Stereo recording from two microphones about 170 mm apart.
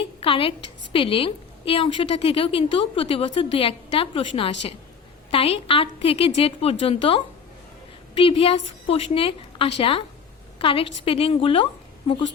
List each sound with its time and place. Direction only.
0.0 s a woman's voice: 35° left (ahead or behind)